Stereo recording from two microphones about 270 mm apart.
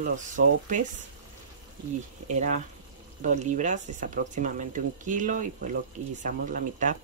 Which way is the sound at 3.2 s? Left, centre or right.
Right.